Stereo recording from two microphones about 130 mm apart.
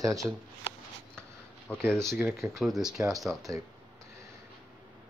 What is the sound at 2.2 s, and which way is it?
Speech, centre (ahead or behind).